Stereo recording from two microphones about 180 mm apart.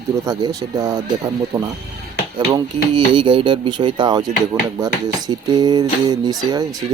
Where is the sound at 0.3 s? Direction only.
20° right (ahead or behind).